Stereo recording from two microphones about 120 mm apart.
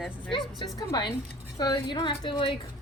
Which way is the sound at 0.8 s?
35° left (ahead or behind).